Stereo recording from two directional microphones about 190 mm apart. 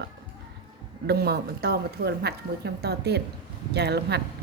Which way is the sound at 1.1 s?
55° right (ahead or behind).